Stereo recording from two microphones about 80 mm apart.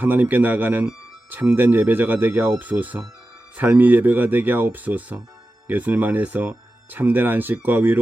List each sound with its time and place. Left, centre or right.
0.0 s speech: right